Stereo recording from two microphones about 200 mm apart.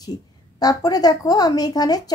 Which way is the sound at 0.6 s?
20° left (ahead or behind).